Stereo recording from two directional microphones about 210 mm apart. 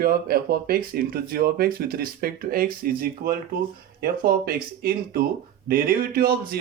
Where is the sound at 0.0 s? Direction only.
45° right (ahead or behind).